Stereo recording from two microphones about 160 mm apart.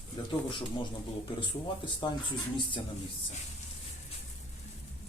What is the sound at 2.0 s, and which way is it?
Speech, 30° left (ahead or behind).